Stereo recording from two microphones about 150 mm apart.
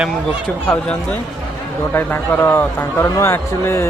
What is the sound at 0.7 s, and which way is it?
A man's voice, 10° left (ahead or behind).